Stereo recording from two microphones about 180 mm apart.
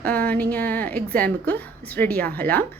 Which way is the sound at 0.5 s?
10° left (ahead or behind).